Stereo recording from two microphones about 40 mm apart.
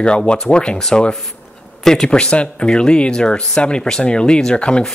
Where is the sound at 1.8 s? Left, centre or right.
Centre.